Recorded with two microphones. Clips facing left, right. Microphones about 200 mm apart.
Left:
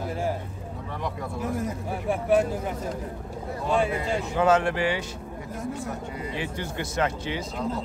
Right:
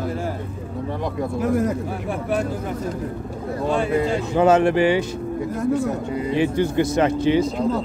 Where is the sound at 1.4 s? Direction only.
80° right.